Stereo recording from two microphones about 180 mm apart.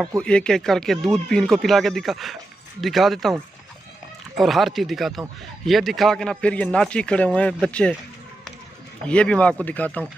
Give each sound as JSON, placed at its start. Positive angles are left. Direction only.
{"t": 0.2, "sound": "a man's voice", "side_deg": 5}
{"t": 4.4, "sound": "a man's voice", "side_deg": 0}
{"t": 9.0, "sound": "speech", "side_deg": 5}